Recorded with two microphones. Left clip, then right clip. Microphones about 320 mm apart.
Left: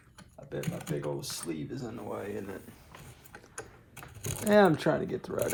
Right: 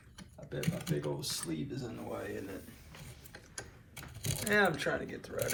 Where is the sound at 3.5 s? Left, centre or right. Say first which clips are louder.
Left 3 dB; centre.